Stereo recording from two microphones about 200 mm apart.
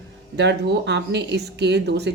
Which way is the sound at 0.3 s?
55° right (ahead or behind).